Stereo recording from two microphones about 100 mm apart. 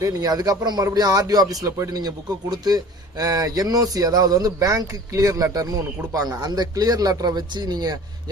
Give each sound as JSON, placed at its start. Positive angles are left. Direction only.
{"t": 0.0, "sound": "speech", "side_deg": -35}